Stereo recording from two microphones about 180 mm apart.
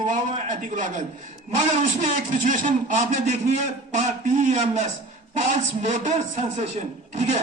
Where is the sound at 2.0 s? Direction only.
45° right (ahead or behind).